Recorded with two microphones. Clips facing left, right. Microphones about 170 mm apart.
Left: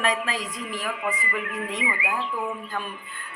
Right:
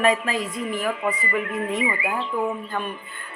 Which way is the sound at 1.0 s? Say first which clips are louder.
Right 4 dB; 30° right (ahead or behind).